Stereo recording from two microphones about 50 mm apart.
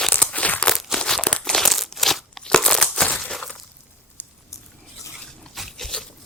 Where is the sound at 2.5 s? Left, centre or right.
Centre.